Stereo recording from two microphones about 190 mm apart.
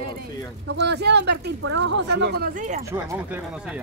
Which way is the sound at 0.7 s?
60° right (ahead or behind).